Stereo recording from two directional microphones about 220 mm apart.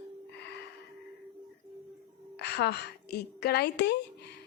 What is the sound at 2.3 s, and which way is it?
A woman's voice, 50° left (ahead or behind).